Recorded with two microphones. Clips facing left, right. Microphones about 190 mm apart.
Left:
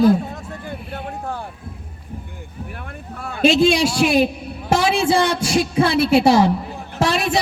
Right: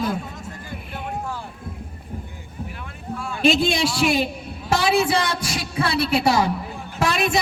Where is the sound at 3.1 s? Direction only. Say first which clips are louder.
Left 4 dB; 60° left (ahead or behind).